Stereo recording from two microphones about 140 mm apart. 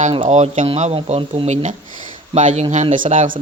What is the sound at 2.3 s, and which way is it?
Speech, 55° right (ahead or behind).